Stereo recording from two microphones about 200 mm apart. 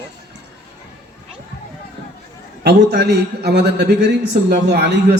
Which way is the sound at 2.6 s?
55° right (ahead or behind).